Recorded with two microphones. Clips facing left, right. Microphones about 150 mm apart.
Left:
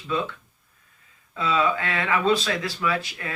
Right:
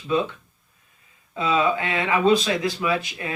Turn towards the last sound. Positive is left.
turn(degrees=-20)  # may be behind; listen again after turning